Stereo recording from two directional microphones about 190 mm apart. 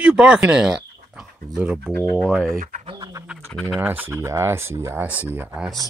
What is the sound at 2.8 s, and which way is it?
Bird, 25° right (ahead or behind).